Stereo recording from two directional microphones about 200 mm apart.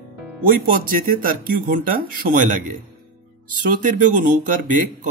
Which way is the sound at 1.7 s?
45° right (ahead or behind).